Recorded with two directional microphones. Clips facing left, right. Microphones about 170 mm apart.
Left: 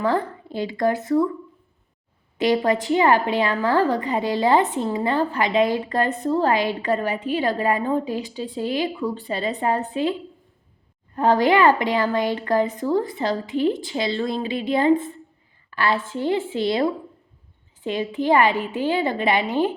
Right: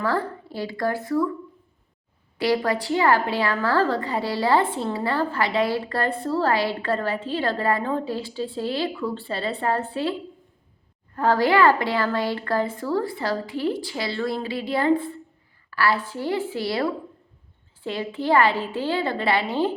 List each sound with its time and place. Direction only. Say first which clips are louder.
0.0 s speech: left 3 dB; 20° left (ahead or behind)
2.4 s a woman's voice: left 3 dB; 20° left (ahead or behind)